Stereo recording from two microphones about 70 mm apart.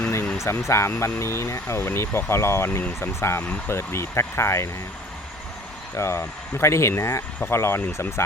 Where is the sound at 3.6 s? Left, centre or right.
Left.